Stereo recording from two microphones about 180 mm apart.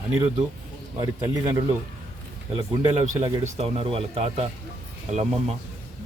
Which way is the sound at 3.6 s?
30° right (ahead or behind).